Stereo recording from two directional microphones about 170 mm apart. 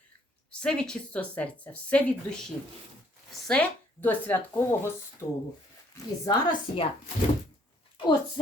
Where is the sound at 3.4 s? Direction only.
5° left (ahead or behind).